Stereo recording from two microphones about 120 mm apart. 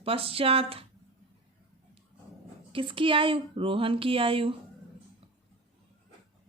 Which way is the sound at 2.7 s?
45° right (ahead or behind).